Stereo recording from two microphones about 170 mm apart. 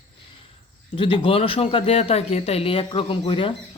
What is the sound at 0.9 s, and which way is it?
Speech, 30° left (ahead or behind).